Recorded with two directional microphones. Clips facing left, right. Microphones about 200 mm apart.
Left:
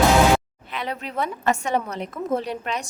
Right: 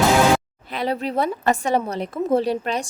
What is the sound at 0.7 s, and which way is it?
A woman's voice, 35° right (ahead or behind).